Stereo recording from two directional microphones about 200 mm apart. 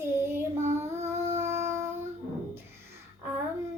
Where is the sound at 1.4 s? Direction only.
15° right (ahead or behind).